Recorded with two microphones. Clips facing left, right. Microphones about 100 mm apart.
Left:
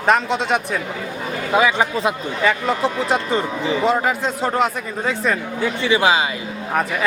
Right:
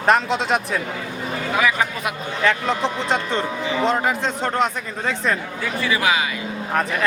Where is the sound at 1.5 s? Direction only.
25° left (ahead or behind).